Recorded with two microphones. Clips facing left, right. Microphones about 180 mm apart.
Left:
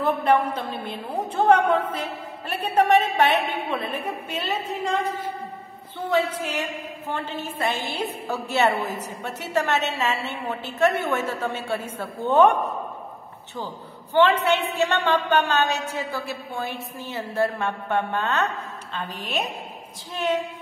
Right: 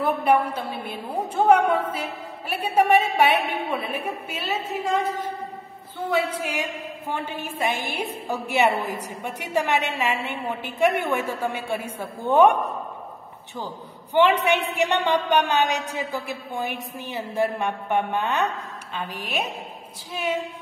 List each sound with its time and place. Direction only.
0.0 s a woman's voice: 10° right (ahead or behind)
5.9 s a woman's voice: 10° right (ahead or behind)
14.4 s a woman's voice: 15° right (ahead or behind)